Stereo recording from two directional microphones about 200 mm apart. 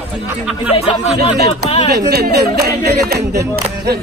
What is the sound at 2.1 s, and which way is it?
Speech, 50° right (ahead or behind).